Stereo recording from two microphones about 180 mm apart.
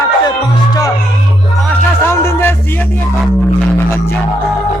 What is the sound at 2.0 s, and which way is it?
Music, 15° left (ahead or behind).